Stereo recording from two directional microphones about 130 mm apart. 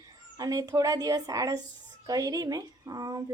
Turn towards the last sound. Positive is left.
turn(degrees=-30)  # may be behind; listen again after turning